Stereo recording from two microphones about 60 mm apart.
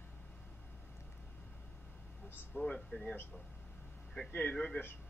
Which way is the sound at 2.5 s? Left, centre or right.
Centre.